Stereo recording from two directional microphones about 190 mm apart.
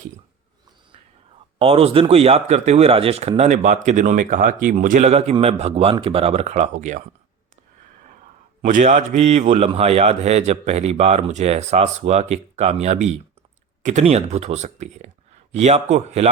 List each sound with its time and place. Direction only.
1.5 s a man's voice: 30° right (ahead or behind)
8.6 s a man's voice: 40° right (ahead or behind)